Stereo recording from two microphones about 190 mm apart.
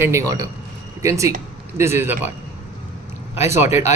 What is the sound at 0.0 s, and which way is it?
A man's voice, 15° right (ahead or behind).